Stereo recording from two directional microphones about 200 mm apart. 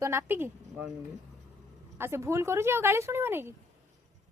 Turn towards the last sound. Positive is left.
turn(degrees=-10)  # may be behind; listen again after turning